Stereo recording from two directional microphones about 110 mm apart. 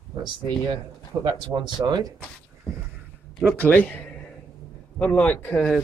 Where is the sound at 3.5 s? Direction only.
15° left (ahead or behind).